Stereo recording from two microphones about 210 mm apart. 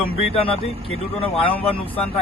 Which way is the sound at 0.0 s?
25° left (ahead or behind).